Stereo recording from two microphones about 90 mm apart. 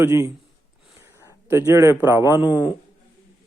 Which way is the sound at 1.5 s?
30° right (ahead or behind).